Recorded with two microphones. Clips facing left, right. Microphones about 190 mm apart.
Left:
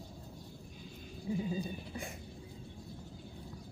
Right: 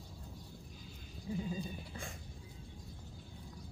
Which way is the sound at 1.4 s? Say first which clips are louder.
Left 4 dB; 20° left (ahead or behind).